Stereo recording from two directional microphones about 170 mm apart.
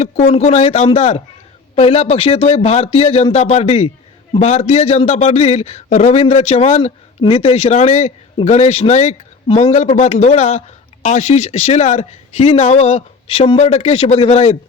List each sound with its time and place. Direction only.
0.0 s a man's voice: 40° left (ahead or behind)